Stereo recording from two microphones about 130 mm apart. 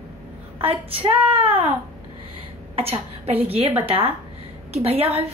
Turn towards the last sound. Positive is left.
turn(degrees=-50)  # may be behind; listen again after turning